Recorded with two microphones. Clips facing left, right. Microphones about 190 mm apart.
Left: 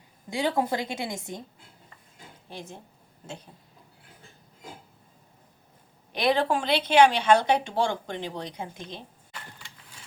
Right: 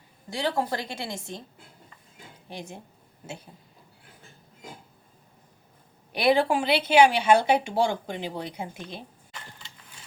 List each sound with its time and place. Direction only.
0.3 s a woman's voice: 15° left (ahead or behind)
2.5 s speech: 15° right (ahead or behind)
6.1 s speech: 10° right (ahead or behind)
9.3 s a sound: 20° right (ahead or behind)